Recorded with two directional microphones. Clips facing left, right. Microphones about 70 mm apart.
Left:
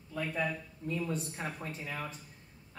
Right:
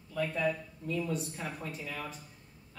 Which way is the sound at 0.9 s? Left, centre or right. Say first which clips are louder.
Right 1 dB; left.